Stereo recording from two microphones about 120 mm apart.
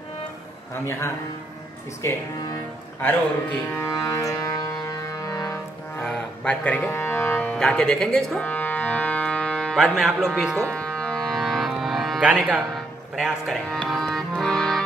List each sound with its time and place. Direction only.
0.8 s a man's voice: 20° left (ahead or behind)
3.7 s music: 20° left (ahead or behind)
6.0 s cattle: 10° left (ahead or behind)
6.9 s music: 15° left (ahead or behind)
9.8 s speech: 5° right (ahead or behind)
10.6 s carnatic music: 10° left (ahead or behind)
12.3 s speech: 10° right (ahead or behind)
13.7 s music: centre (ahead or behind)